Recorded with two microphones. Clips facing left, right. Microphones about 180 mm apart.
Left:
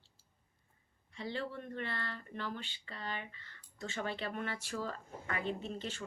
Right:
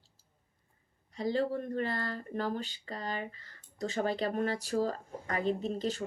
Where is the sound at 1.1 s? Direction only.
40° right (ahead or behind).